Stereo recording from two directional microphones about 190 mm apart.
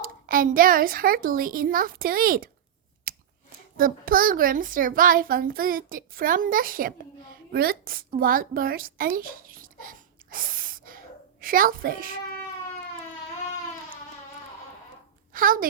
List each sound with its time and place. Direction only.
0.0 s a child's voice: 50° right (ahead or behind)
3.1 s chewing: 50° right (ahead or behind)
3.8 s a child's voice: 50° right (ahead or behind)
15.3 s a woman's voice: 45° right (ahead or behind)